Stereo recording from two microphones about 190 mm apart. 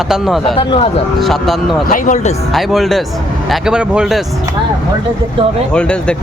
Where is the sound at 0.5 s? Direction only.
30° left (ahead or behind).